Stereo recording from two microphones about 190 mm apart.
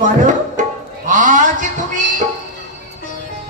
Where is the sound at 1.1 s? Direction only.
40° right (ahead or behind).